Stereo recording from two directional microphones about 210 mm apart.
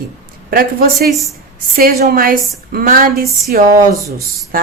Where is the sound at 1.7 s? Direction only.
45° right (ahead or behind).